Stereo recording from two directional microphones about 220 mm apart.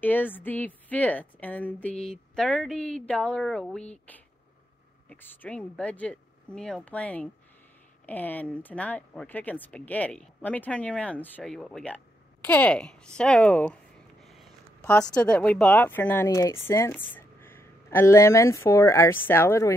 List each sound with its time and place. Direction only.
0.0 s speech: 10° left (ahead or behind)
5.1 s speech: 10° left (ahead or behind)